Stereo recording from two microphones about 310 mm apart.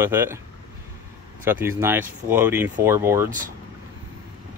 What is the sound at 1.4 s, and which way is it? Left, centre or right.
Speech, centre.